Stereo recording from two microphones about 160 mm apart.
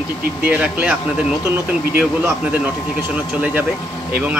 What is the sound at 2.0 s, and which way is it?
Speech, 10° right (ahead or behind).